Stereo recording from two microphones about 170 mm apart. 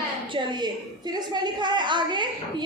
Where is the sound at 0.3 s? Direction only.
25° right (ahead or behind).